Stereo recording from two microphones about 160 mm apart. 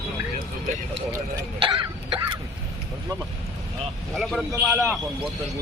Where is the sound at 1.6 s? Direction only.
30° right (ahead or behind).